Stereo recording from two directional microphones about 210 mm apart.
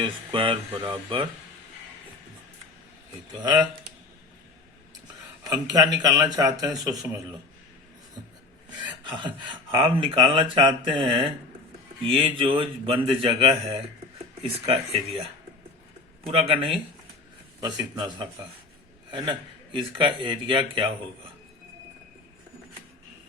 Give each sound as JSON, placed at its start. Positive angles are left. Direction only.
{"t": 0.0, "sound": "speech", "side_deg": -25}
{"t": 3.4, "sound": "speech", "side_deg": -20}
{"t": 5.5, "sound": "speech", "side_deg": -20}
{"t": 9.0, "sound": "speech", "side_deg": -25}
{"t": 16.2, "sound": "speech", "side_deg": -30}
{"t": 19.7, "sound": "speech", "side_deg": -25}